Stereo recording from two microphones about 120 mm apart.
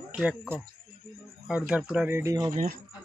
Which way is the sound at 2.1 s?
25° right (ahead or behind).